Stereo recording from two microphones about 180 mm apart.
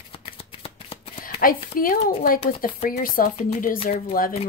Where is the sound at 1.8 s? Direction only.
50° left (ahead or behind).